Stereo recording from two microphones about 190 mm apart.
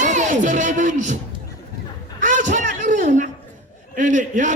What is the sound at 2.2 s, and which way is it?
A man's voice, 40° right (ahead or behind).